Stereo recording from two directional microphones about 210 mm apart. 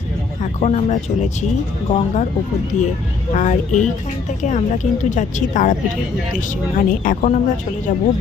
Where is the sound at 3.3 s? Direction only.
35° left (ahead or behind).